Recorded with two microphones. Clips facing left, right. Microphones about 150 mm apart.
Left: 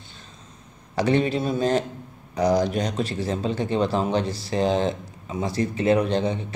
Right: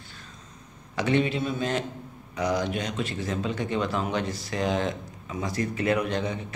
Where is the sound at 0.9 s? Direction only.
35° left (ahead or behind).